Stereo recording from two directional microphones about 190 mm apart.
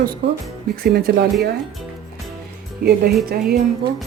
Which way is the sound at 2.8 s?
55° right (ahead or behind).